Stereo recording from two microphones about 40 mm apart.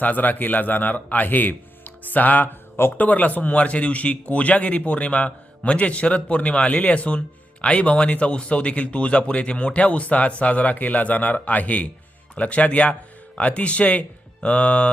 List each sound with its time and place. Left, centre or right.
0.0 s a man's voice: left
14.4 s music: left